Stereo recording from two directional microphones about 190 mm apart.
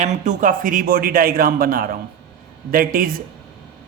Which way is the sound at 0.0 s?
40° right (ahead or behind).